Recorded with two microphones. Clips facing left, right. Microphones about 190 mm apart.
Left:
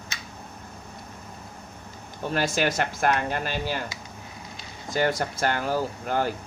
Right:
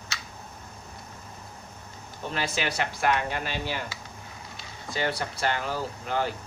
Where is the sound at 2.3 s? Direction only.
45° left (ahead or behind).